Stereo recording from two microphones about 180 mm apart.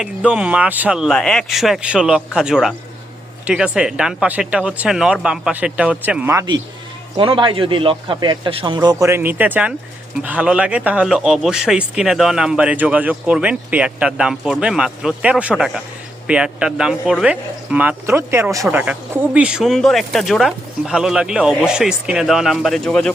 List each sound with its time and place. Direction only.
0.0 s a man's voice: 5° right (ahead or behind)